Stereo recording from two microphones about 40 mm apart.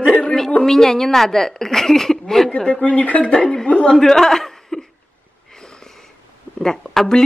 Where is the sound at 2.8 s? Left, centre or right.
Left.